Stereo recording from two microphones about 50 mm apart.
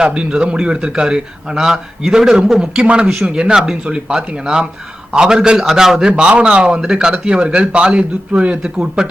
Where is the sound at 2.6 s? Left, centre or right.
Right.